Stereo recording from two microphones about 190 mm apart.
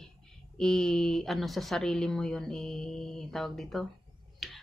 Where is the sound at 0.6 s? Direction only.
Centre (ahead or behind).